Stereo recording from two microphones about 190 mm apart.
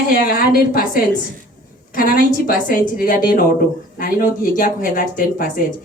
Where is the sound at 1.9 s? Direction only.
45° left (ahead or behind).